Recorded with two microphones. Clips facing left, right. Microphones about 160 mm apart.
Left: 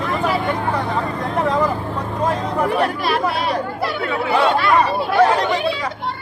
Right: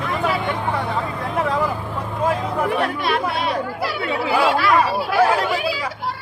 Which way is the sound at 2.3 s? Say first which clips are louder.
Left 2 dB; centre (ahead or behind).